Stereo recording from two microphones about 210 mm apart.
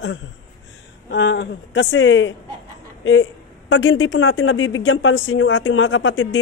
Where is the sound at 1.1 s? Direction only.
60° left (ahead or behind).